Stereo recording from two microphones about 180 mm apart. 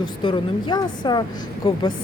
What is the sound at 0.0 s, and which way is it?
Speech, 25° left (ahead or behind).